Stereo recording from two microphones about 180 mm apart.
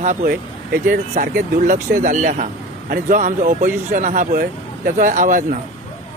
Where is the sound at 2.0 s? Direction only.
45° right (ahead or behind).